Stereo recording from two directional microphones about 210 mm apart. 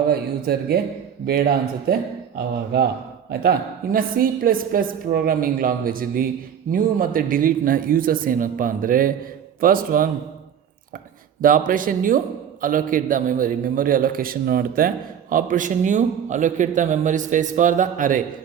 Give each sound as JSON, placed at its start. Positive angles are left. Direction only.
{"t": 0.1, "sound": "a woman's voice", "side_deg": -45}
{"t": 3.9, "sound": "a woman's voice", "side_deg": -45}
{"t": 11.3, "sound": "a man's voice", "side_deg": -40}